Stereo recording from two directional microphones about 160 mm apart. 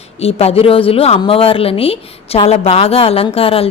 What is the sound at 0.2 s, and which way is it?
A woman's voice, 40° left (ahead or behind).